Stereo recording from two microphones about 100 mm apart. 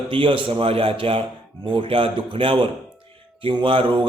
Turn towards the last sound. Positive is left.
turn(degrees=-60)  # may be behind; listen again after turning